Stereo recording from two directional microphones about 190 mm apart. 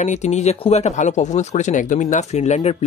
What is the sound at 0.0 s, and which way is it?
Speech, 35° left (ahead or behind).